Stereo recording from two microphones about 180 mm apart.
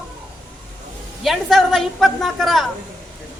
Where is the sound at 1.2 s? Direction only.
Centre (ahead or behind).